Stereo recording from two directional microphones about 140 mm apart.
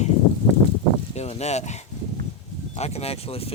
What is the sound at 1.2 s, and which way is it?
Speech, 50° left (ahead or behind).